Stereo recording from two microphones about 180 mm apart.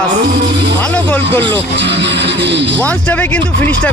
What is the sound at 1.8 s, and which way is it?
Speech, 75° right (ahead or behind).